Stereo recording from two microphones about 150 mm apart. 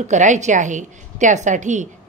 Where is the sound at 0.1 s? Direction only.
55° right (ahead or behind).